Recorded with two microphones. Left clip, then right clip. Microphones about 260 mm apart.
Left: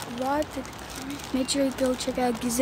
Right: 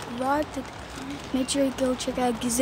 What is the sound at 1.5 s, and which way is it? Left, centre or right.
Speech, centre.